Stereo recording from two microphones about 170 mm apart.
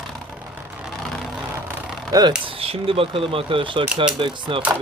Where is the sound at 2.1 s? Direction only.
20° right (ahead or behind).